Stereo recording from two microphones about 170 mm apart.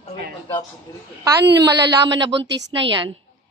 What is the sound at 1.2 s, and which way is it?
A woman's voice, 20° right (ahead or behind).